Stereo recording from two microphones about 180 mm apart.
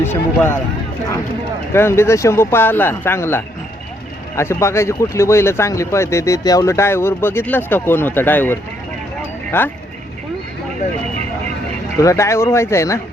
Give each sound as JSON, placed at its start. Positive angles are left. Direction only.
{"t": 0.0, "sound": "speech", "side_deg": 10}
{"t": 1.7, "sound": "speech", "side_deg": 15}
{"t": 9.5, "sound": "speech", "side_deg": 10}
{"t": 11.9, "sound": "speech", "side_deg": 15}